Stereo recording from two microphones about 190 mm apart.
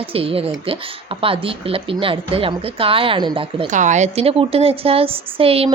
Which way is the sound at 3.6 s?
40° right (ahead or behind).